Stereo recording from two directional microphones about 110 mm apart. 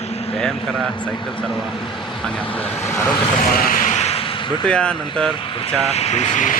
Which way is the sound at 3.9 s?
75° left (ahead or behind).